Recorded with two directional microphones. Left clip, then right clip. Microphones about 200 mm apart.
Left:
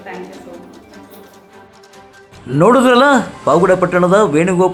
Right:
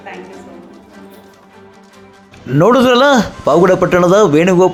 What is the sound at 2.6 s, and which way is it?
Speech, 20° right (ahead or behind).